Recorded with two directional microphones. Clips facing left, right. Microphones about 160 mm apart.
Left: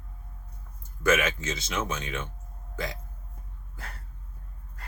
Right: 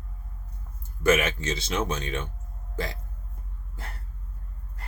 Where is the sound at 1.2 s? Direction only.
30° right (ahead or behind).